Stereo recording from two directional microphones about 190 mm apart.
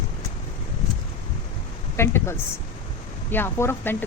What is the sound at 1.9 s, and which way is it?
A woman's voice, 15° left (ahead or behind).